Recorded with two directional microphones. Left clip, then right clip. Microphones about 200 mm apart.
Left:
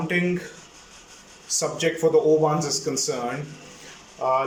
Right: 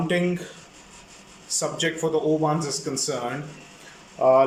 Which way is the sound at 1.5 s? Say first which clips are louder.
Left 1 dB; 5° right (ahead or behind).